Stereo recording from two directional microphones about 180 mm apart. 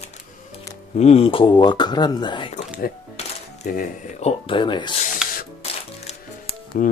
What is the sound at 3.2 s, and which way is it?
Music, 35° left (ahead or behind).